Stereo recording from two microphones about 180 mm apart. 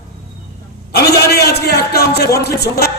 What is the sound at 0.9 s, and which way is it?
A man's voice, 60° left (ahead or behind).